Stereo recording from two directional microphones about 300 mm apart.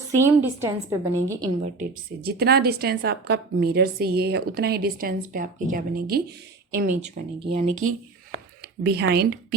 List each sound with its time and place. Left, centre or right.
0.2 s a woman's voice: centre
1.8 s a woman's voice: right
7.0 s speech: centre
8.6 s speech: right